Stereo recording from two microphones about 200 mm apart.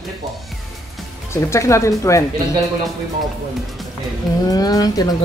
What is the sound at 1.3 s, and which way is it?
Speech, 15° left (ahead or behind).